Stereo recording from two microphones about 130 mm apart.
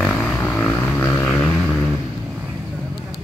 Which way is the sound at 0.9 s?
15° left (ahead or behind).